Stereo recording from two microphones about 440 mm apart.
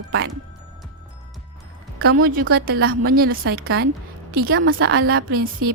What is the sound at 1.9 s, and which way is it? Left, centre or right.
A woman's voice, right.